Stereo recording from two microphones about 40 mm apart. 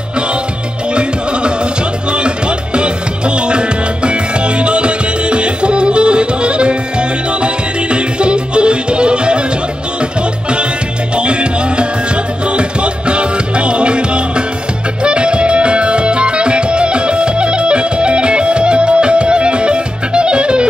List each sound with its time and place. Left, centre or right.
2.1 s music: right
11.1 s music: right